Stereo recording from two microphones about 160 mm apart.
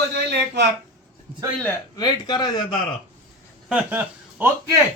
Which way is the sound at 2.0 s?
25° left (ahead or behind).